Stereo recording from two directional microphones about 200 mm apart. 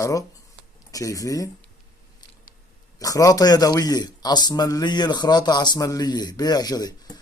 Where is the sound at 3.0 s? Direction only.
15° left (ahead or behind).